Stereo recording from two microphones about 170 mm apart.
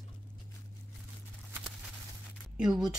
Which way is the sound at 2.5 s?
5° right (ahead or behind).